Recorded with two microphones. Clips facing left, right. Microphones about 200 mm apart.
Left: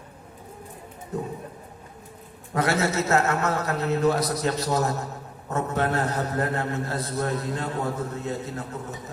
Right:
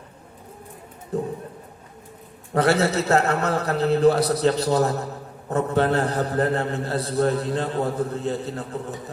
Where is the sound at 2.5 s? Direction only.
30° right (ahead or behind).